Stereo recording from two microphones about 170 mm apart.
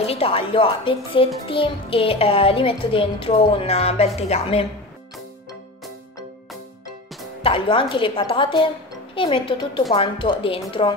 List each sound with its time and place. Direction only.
0.0 s a child's voice: 35° left (ahead or behind)
7.4 s a child's voice: 30° left (ahead or behind)